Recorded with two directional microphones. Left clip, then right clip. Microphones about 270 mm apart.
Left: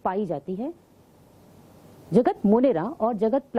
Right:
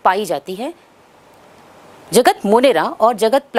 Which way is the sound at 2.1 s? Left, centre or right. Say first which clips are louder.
Right 9 dB; centre.